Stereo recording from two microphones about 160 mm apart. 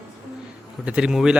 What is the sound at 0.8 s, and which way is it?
Speech, 5° right (ahead or behind).